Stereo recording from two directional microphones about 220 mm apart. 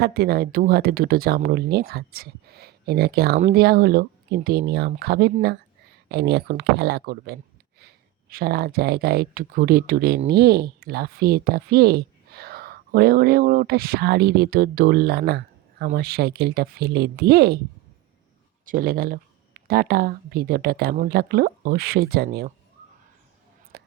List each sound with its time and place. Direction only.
0.0 s speech: 45° right (ahead or behind)
18.6 s speech: 40° right (ahead or behind)
23.7 s whispering: 45° right (ahead or behind)